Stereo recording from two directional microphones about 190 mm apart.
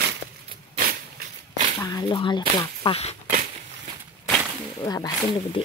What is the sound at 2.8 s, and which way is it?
Speech, 30° left (ahead or behind).